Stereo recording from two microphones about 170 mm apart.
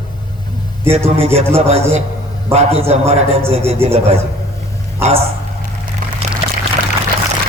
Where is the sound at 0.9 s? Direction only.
35° right (ahead or behind).